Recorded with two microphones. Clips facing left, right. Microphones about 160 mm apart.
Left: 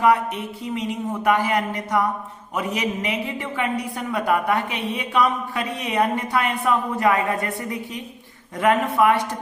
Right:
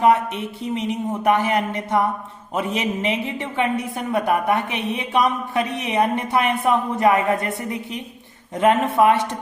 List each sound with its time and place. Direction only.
0.7 s a woman's voice: 20° right (ahead or behind)